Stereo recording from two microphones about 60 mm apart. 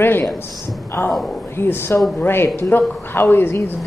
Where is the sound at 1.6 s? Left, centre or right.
Left.